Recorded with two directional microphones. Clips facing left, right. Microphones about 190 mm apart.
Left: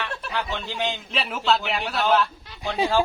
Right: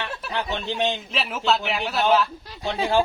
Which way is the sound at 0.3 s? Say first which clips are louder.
Right 3 dB; 20° right (ahead or behind).